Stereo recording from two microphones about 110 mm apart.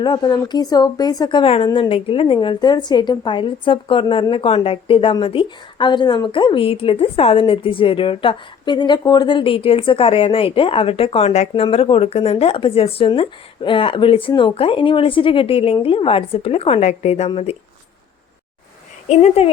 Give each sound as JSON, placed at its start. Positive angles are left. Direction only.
{"t": 0.0, "sound": "speech", "side_deg": 40}
{"t": 1.6, "sound": "speech", "side_deg": 40}
{"t": 1.9, "sound": "a woman's voice", "side_deg": 55}
{"t": 11.6, "sound": "a woman's voice", "side_deg": 60}
{"t": 19.0, "sound": "speech", "side_deg": 80}